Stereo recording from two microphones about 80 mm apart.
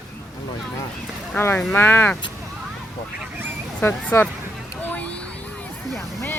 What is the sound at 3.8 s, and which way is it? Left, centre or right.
Speech, left.